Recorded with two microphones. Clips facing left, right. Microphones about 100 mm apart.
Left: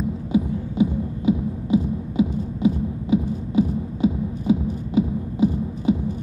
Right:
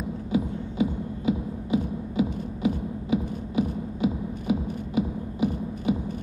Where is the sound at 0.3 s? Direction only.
25° left (ahead or behind).